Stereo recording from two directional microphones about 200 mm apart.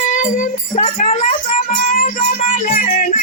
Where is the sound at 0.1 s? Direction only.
40° left (ahead or behind).